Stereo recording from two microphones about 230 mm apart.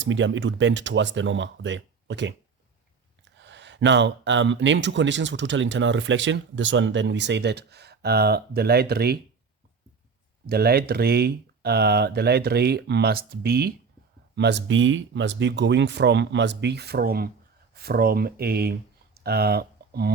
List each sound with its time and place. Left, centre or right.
0.0 s speech: right
10.4 s speech: right